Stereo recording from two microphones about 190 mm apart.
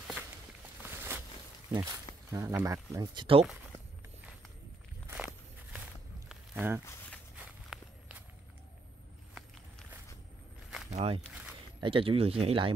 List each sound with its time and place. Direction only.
0.8 s a sound: 10° right (ahead or behind)
1.7 s speech: 20° right (ahead or behind)
5.1 s walk: 5° right (ahead or behind)
10.9 s speech: 35° right (ahead or behind)